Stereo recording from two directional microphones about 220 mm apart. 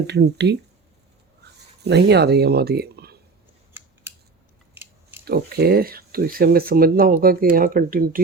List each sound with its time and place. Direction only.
0.1 s speech: 50° right (ahead or behind)
1.8 s speech: 50° right (ahead or behind)
3.8 s scissors: 10° right (ahead or behind)
4.7 s biting: 10° right (ahead or behind)
5.2 s speech: 45° right (ahead or behind)